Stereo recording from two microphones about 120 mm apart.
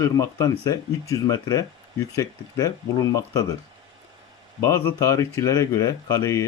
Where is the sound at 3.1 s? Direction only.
30° left (ahead or behind).